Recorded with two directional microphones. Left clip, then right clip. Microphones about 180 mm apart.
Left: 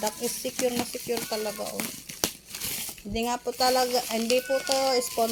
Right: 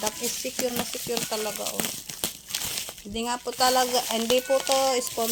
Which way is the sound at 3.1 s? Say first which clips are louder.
Left 2 dB; 10° right (ahead or behind).